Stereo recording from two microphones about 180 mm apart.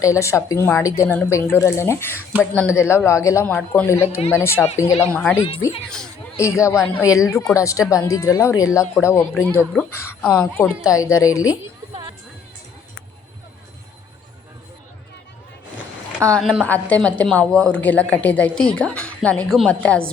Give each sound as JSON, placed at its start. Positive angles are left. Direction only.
{"t": 0.0, "sound": "a woman's voice", "side_deg": 15}
{"t": 6.3, "sound": "a woman's voice", "side_deg": 15}
{"t": 16.2, "sound": "a woman's voice", "side_deg": 5}